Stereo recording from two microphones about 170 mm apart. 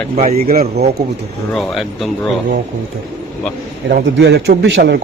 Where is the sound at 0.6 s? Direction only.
40° right (ahead or behind).